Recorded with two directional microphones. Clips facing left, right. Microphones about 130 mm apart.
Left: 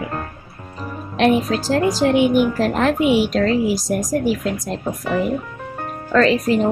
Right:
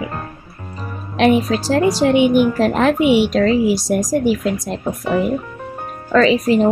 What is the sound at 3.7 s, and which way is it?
Speech, 90° right.